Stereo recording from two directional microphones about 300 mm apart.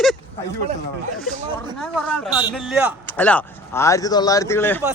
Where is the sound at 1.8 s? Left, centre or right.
Centre.